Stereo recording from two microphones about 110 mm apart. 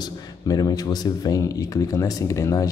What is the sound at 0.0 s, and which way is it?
Speech, 35° left (ahead or behind).